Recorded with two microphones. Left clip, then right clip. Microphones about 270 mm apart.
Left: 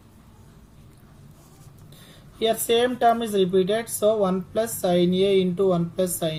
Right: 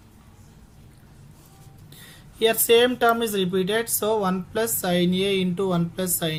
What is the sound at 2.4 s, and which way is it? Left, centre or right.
Speech, right.